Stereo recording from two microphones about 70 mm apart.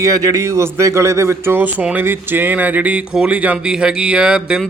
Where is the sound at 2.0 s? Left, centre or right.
Right.